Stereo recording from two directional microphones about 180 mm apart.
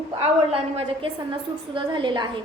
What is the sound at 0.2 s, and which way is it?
A woman's voice, 30° right (ahead or behind).